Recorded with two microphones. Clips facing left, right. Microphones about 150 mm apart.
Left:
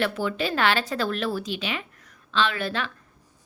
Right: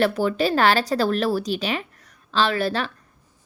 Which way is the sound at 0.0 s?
40° right (ahead or behind).